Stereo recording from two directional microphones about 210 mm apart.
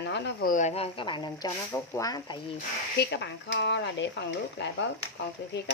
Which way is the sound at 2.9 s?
55° left (ahead or behind).